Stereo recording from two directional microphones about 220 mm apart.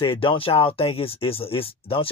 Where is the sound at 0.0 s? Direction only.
25° left (ahead or behind).